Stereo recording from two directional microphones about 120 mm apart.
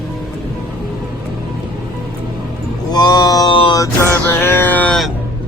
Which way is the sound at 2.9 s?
35° left (ahead or behind).